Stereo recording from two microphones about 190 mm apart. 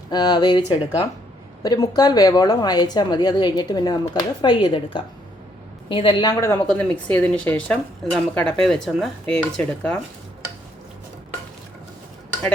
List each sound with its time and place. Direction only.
0.1 s a woman's voice: 20° left (ahead or behind); by 10.0 s 5° left (ahead or behind)